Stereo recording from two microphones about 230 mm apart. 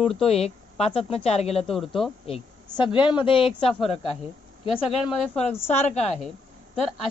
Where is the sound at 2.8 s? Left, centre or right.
Left.